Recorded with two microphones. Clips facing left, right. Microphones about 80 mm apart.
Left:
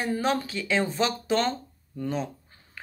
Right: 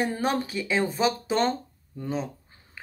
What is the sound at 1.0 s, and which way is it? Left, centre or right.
Speech, centre.